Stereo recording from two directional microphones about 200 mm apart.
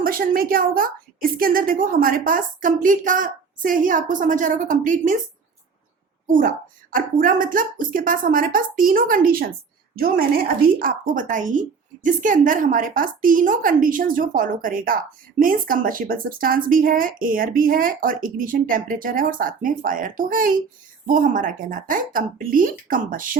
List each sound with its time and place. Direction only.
0.0 s speech: 45° right (ahead or behind)
6.9 s speech: 45° right (ahead or behind)